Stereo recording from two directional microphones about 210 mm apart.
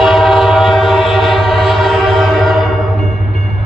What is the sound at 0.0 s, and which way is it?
Train, centre (ahead or behind).